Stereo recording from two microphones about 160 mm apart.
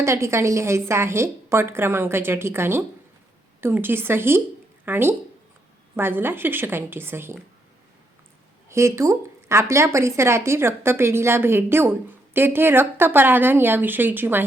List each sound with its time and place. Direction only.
0.0 s a woman's voice: 15° right (ahead or behind)
8.7 s a woman's voice: 20° right (ahead or behind)